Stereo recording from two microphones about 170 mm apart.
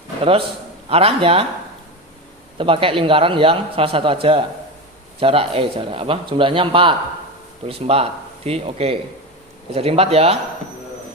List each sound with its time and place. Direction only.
0.9 s a man's voice: 35° right (ahead or behind)
2.6 s a man's voice: 30° right (ahead or behind)